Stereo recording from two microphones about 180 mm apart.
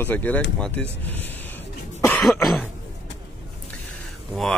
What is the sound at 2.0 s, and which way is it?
Cough, 5° left (ahead or behind).